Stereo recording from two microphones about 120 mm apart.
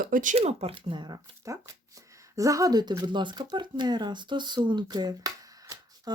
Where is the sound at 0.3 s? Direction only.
55° right (ahead or behind).